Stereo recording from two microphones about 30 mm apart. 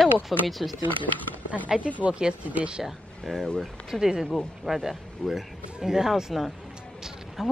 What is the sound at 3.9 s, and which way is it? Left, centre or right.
Speech, centre.